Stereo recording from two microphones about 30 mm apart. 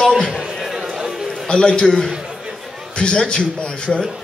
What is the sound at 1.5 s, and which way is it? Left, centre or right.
Speech, left.